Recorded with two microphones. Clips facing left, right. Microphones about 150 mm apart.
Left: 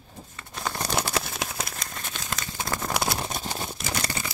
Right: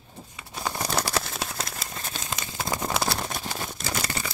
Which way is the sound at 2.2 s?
20° right (ahead or behind).